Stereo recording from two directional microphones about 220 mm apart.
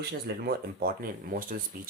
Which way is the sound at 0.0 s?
45° right (ahead or behind).